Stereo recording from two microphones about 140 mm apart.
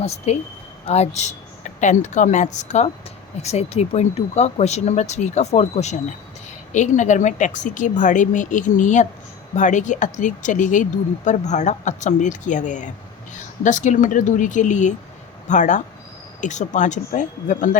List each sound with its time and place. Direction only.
0.0 s speech: 50° left (ahead or behind)